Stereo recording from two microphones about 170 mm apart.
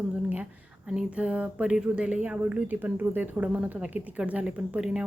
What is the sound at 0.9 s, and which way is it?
Speech, 5° right (ahead or behind).